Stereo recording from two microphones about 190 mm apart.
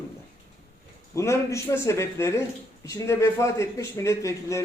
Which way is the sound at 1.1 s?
15° left (ahead or behind).